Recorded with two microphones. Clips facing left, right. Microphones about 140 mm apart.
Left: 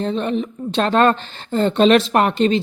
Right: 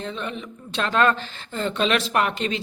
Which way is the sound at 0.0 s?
35° left (ahead or behind).